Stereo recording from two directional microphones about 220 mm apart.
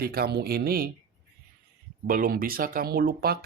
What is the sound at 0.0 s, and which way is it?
Speech, 45° right (ahead or behind).